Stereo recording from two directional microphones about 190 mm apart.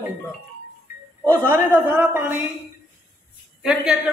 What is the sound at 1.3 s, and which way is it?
Speech, 10° right (ahead or behind).